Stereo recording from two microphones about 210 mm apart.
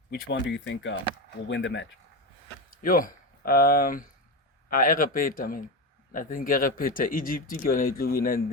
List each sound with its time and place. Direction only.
0.1 s speech: 55° left (ahead or behind)
2.6 s speech: 40° left (ahead or behind)